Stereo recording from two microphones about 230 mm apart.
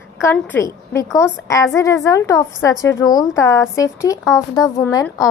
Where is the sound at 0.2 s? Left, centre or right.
Centre.